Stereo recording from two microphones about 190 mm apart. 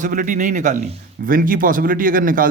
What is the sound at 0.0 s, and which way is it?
A man's voice, 45° right (ahead or behind).